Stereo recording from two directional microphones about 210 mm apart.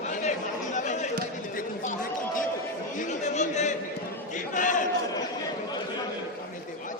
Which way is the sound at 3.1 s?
35° left (ahead or behind).